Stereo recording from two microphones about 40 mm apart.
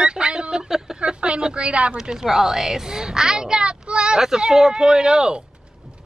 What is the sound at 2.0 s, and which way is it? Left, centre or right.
Speech, centre.